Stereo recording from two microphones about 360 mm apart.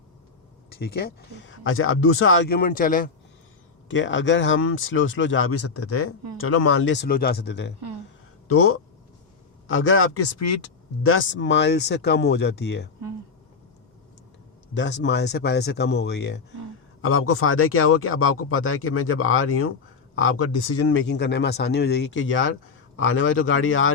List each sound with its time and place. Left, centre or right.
0.7 s a man's voice: left
14.7 s a man's voice: left